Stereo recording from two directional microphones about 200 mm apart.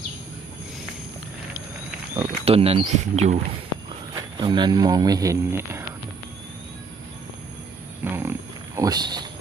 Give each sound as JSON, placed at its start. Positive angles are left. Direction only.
{"t": 2.4, "sound": "speech", "side_deg": -30}
{"t": 4.1, "sound": "speech", "side_deg": -25}
{"t": 8.1, "sound": "wild animals", "side_deg": -10}